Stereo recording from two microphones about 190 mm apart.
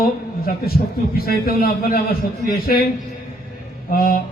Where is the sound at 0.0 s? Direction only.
50° left (ahead or behind).